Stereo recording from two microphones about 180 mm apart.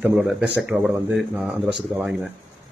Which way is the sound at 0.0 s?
5° right (ahead or behind).